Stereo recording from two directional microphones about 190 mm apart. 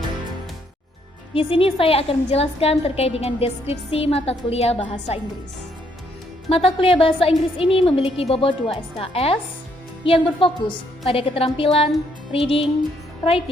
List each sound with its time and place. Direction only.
1.3 s a woman's voice: 30° left (ahead or behind)
6.5 s a woman's voice: 30° left (ahead or behind)